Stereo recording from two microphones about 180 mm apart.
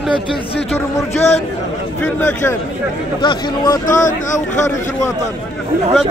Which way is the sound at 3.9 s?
45° left (ahead or behind).